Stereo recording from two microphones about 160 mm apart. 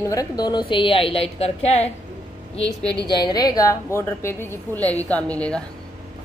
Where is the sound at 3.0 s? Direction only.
25° left (ahead or behind); by 5.6 s 5° left (ahead or behind).